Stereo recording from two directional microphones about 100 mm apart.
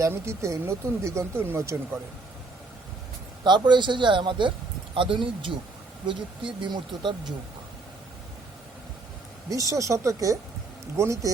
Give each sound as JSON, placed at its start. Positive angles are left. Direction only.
{"t": 0.0, "sound": "speech", "side_deg": -30}
{"t": 3.4, "sound": "a man's voice", "side_deg": -50}
{"t": 9.5, "sound": "speech", "side_deg": -35}